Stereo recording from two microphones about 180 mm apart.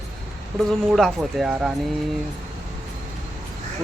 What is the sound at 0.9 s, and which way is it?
Speech, centre (ahead or behind).